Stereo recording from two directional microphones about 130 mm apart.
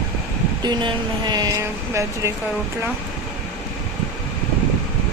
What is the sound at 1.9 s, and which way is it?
Speech, 20° right (ahead or behind).